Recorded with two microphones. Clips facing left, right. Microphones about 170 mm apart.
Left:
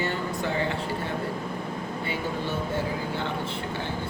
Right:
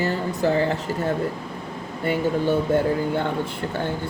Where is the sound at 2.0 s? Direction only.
50° right (ahead or behind).